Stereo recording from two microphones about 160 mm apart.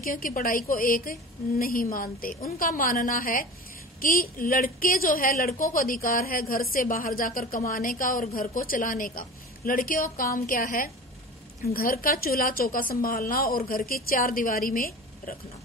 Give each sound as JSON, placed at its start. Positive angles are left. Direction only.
{"t": 0.0, "sound": "a woman's voice", "side_deg": 60}